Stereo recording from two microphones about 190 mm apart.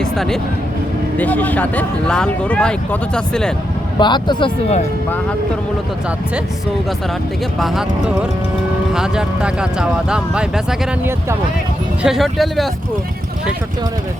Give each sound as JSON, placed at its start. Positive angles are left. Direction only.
{"t": 0.0, "sound": "a sound", "side_deg": 5}
{"t": 1.2, "sound": "speech", "side_deg": 10}
{"t": 4.0, "sound": "speech", "side_deg": 25}
{"t": 7.6, "sound": "speech", "side_deg": 0}